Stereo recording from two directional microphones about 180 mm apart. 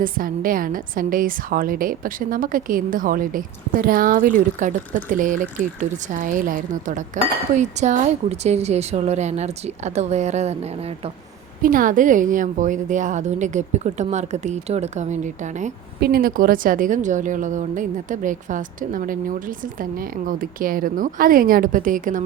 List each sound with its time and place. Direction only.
0.0 s a woman's voice: 50° right (ahead or behind); by 11.1 s 35° right (ahead or behind)
11.6 s a woman's voice: 50° right (ahead or behind)
16.0 s a woman's voice: 60° right (ahead or behind)